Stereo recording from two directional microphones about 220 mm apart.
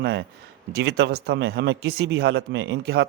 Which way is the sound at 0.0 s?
50° right (ahead or behind).